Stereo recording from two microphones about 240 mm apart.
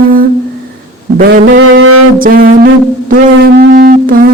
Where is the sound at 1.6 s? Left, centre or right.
Right.